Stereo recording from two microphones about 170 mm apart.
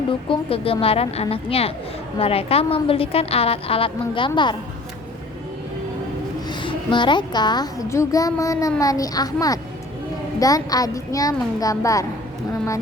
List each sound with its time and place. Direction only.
0.1 s a woman's voice: 30° left (ahead or behind)
6.5 s a child's voice: 30° left (ahead or behind)